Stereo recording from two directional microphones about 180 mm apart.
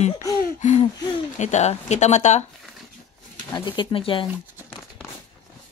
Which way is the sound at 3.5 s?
25° left (ahead or behind).